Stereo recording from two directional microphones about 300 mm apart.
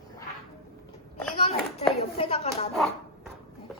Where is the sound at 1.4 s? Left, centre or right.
Left.